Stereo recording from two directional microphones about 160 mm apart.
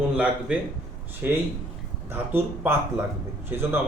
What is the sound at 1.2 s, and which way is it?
A man's voice, 10° right (ahead or behind).